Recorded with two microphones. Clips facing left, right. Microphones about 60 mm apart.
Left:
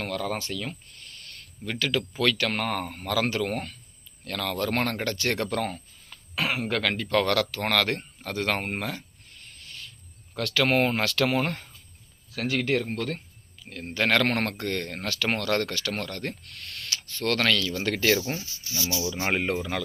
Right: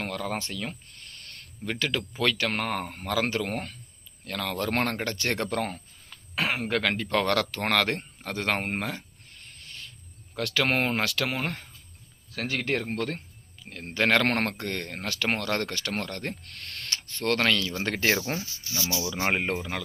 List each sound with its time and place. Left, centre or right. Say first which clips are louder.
0.0 s speech: left 1 dB; right
1.6 s speech: left 2 dB; right
10.3 s speech: left 2 dB; centre
12.3 s speech: left 3 dB; right
16.5 s a sound: even; right
17.0 s speech: even; right